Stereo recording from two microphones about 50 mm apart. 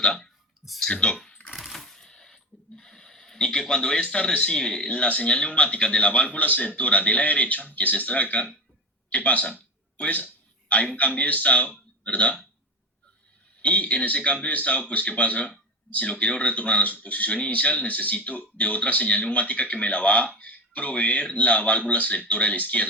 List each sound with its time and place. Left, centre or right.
0.0 s speech: centre
1.6 s a sound: centre
4.1 s speech: centre
4.9 s a man's voice: left
13.6 s speech: left